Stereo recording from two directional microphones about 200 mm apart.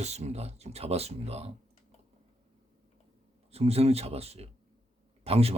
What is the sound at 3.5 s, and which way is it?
Speech, 30° right (ahead or behind).